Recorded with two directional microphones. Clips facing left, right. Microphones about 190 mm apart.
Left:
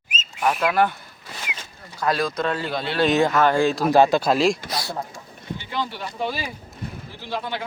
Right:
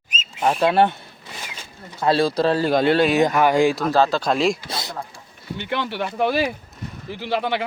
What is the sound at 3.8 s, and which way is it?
Speech, 15° left (ahead or behind).